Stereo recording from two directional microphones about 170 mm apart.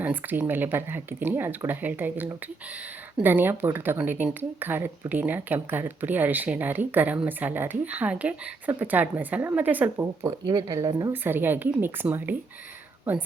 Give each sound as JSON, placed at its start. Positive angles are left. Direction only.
{"t": 0.0, "sound": "speech", "side_deg": -10}
{"t": 10.2, "sound": "speech", "side_deg": -20}